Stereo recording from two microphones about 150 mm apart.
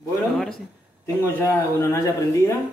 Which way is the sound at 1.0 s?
15° left (ahead or behind).